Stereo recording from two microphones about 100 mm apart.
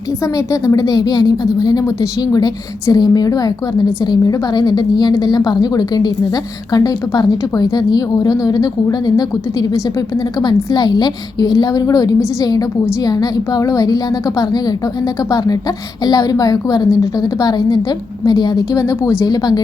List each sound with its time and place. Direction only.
0.3 s a woman's voice: 35° left (ahead or behind)
16.0 s a woman's voice: 40° left (ahead or behind)